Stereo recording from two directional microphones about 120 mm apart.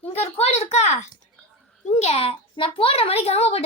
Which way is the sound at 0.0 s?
55° left (ahead or behind).